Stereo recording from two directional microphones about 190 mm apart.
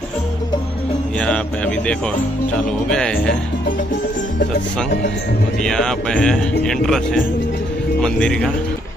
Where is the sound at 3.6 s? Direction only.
45° left (ahead or behind).